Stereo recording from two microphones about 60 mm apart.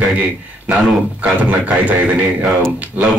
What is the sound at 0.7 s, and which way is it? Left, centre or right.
Speech, right.